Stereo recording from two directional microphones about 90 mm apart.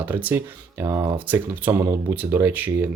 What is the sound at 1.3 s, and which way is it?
Speech, 25° right (ahead or behind).